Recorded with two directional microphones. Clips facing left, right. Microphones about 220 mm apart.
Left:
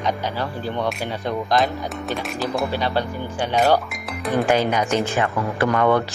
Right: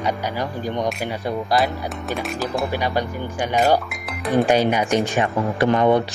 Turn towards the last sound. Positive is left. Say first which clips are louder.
# right 2 dB
turn(degrees=-20)  # may be behind; listen again after turning